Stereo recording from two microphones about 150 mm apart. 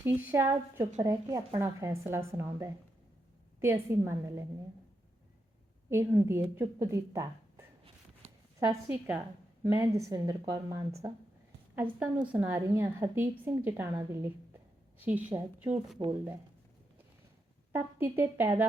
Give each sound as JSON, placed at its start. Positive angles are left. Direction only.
{"t": 0.0, "sound": "a woman's voice", "side_deg": -15}
{"t": 5.9, "sound": "a woman's voice", "side_deg": -15}
{"t": 8.9, "sound": "a woman's voice", "side_deg": -10}
{"t": 11.7, "sound": "a woman's voice", "side_deg": -10}
{"t": 16.0, "sound": "a woman's voice", "side_deg": -25}
{"t": 17.7, "sound": "a woman's voice", "side_deg": -15}